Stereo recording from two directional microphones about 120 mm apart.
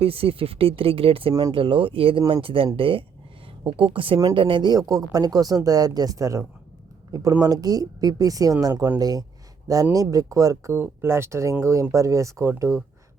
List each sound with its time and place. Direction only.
0.0 s speech: 50° right (ahead or behind)
1.3 s speech: 30° right (ahead or behind)
1.5 s speech: 45° right (ahead or behind); by 12.8 s 20° right (ahead or behind)